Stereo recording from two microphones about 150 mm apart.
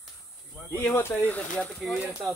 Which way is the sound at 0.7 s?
5° left (ahead or behind).